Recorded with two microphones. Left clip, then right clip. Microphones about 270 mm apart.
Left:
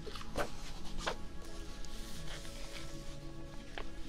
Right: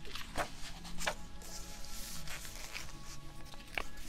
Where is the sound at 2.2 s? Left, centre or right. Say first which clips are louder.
Right 1 dB; right.